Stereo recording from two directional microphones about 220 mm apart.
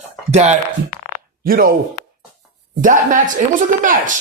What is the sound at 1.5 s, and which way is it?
Speech, 40° right (ahead or behind).